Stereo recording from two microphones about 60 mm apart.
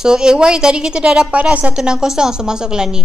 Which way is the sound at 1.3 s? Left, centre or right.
Right.